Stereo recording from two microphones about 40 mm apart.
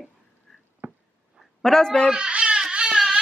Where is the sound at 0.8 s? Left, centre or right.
Right.